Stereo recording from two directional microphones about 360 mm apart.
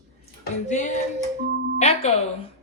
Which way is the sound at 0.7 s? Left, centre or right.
Centre.